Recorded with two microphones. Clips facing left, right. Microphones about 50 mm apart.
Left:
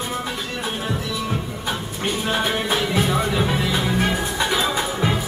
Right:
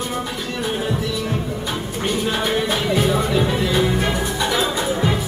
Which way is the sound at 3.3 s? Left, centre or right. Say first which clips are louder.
Right 3 dB; centre.